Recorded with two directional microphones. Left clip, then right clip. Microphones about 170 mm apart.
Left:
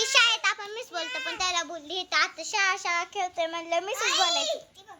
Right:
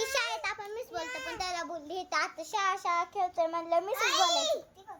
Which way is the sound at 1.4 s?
5° left (ahead or behind).